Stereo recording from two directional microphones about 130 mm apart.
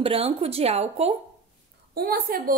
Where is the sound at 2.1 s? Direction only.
90° right.